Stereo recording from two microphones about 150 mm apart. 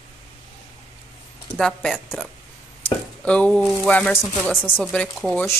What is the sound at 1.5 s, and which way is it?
Speech, 5° left (ahead or behind).